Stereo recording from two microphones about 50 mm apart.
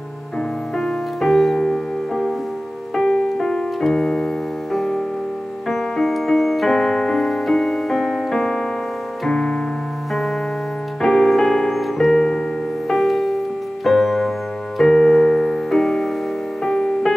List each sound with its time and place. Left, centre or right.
0.7 s music: centre
3.0 s keyboard: centre
4.7 s music: centre
11.0 s piano: centre
12.8 s music: centre
14.8 s keyboard: centre
16.6 s music: centre